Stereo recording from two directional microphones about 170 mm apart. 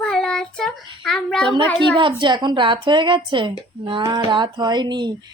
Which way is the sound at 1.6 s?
10° left (ahead or behind).